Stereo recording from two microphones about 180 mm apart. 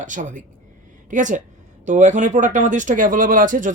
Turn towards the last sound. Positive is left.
turn(degrees=-45)  # may be behind; listen again after turning